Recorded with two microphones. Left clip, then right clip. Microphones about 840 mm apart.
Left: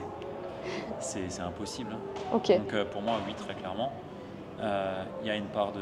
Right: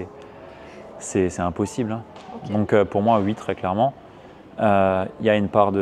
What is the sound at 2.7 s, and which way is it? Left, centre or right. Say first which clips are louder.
Speech: right 13 dB; right.